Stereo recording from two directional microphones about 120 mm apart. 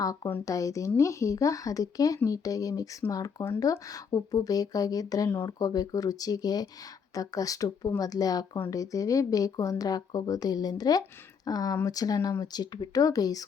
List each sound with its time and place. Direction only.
0.0 s a woman's voice: 30° left (ahead or behind)